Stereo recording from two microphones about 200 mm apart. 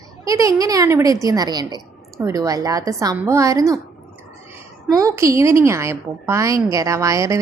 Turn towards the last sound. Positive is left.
turn(degrees=-15)  # may be behind; listen again after turning